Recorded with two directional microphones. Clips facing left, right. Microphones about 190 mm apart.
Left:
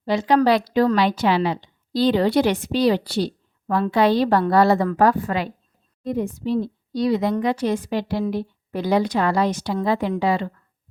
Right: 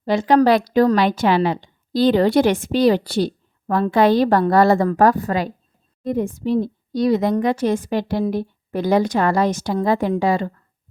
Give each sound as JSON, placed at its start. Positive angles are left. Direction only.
{"t": 0.0, "sound": "a woman's voice", "side_deg": -50}